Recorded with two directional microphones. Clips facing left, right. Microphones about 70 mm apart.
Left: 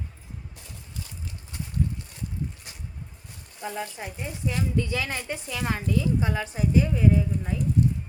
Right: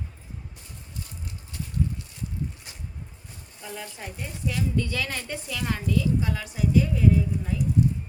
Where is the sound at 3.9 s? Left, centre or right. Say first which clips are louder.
Left 2 dB; centre.